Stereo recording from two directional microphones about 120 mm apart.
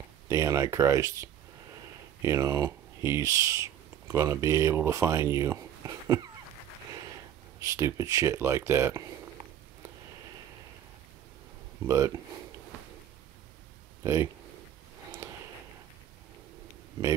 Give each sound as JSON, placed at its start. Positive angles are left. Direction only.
{"t": 0.3, "sound": "speech", "side_deg": -25}
{"t": 7.6, "sound": "speech", "side_deg": -25}
{"t": 11.8, "sound": "speech", "side_deg": -25}
{"t": 14.0, "sound": "speech", "side_deg": -20}
{"t": 15.2, "sound": "a sound", "side_deg": -20}